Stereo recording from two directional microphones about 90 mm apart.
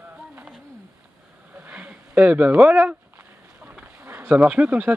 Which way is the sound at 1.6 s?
15° right (ahead or behind).